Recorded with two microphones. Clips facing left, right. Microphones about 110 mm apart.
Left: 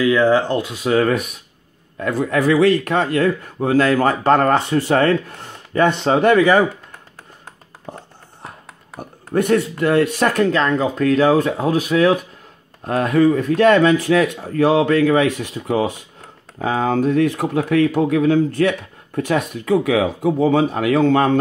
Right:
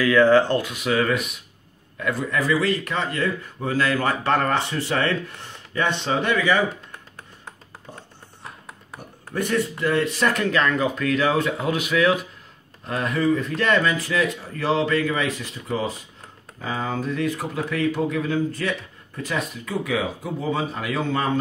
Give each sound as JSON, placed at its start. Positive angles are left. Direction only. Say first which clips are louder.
{"t": 0.0, "sound": "speech", "louder": "left 1 dB", "side_deg": 20}
{"t": 2.0, "sound": "a man's voice", "louder": "left 6 dB", "side_deg": 45}
{"t": 7.9, "sound": "music", "louder": "left 8 dB", "side_deg": 50}
{"t": 9.3, "sound": "speech", "louder": "left 7 dB", "side_deg": 55}